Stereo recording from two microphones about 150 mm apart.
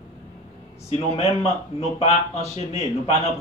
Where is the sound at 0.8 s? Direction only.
45° left (ahead or behind).